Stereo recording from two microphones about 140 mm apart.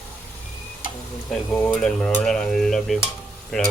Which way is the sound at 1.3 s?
10° left (ahead or behind).